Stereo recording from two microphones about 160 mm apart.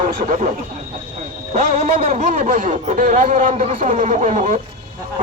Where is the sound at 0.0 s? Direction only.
50° right (ahead or behind).